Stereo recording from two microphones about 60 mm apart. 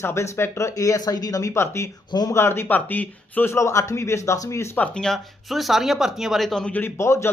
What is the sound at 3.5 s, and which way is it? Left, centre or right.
Speech, left.